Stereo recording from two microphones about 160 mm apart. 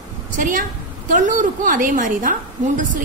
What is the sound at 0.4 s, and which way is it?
A woman's voice, 55° right (ahead or behind).